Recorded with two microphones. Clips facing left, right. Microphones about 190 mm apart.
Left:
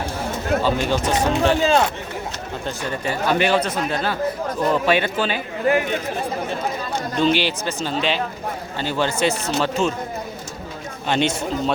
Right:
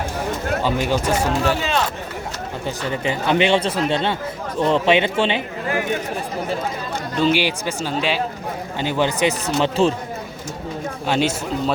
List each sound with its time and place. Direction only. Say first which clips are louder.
0.6 s speech: right 2 dB; 15° right (ahead or behind)
1.6 s speech: left 5 dB; 30° left (ahead or behind)
2.6 s speech: right 2 dB; 20° right (ahead or behind)
7.2 s speech: right 1 dB; 10° right (ahead or behind)
11.0 s a man's voice: even; 5° right (ahead or behind)